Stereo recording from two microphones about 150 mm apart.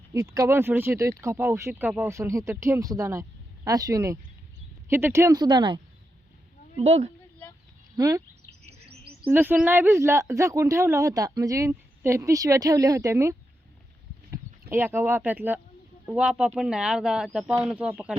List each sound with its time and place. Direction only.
0.1 s speech: 20° right (ahead or behind)
6.7 s speech: 45° right (ahead or behind)
7.9 s speech: 20° right (ahead or behind)
9.3 s speech: 15° right (ahead or behind)
14.7 s speech: 15° right (ahead or behind)